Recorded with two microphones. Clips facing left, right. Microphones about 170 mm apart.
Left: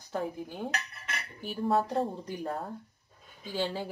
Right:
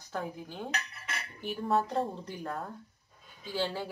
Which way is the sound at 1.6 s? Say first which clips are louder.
Left 2 dB; centre (ahead or behind).